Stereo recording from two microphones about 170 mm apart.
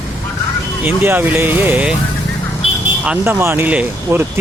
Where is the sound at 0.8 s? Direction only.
10° right (ahead or behind).